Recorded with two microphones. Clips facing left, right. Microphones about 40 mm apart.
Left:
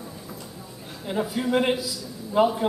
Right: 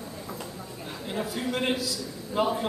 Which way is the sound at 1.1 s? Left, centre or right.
Centre.